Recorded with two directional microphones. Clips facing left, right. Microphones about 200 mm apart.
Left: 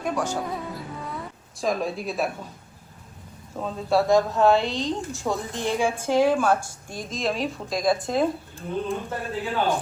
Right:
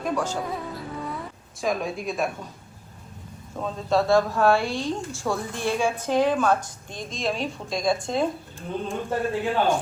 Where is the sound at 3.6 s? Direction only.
5° left (ahead or behind).